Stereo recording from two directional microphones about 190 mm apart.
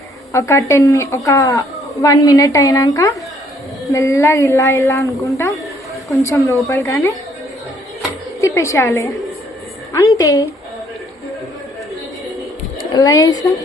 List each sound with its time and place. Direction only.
0.3 s a woman's voice: 15° left (ahead or behind)
8.4 s a woman's voice: 15° left (ahead or behind)
12.9 s speech: 20° left (ahead or behind)